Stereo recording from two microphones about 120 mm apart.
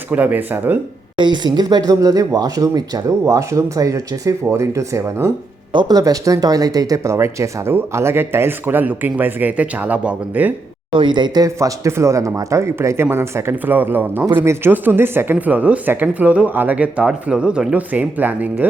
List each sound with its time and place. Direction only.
0.1 s speech: 15° right (ahead or behind)
1.2 s speech: 40° right (ahead or behind); by 5.3 s 20° right (ahead or behind)
5.7 s speech: 30° right (ahead or behind); by 10.5 s 10° right (ahead or behind)
10.9 s speech: 40° right (ahead or behind)
11.4 s speech: 25° right (ahead or behind)